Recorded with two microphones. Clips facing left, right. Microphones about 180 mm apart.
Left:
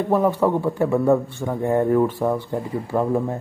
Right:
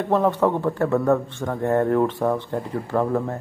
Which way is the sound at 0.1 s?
10° left (ahead or behind).